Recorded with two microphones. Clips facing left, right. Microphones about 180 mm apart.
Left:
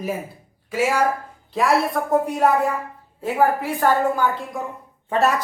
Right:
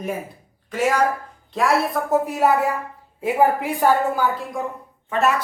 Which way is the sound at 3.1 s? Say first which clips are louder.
Right 1 dB; 15° right (ahead or behind).